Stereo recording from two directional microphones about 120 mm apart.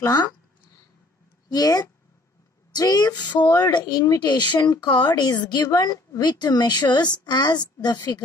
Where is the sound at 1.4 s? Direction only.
35° left (ahead or behind).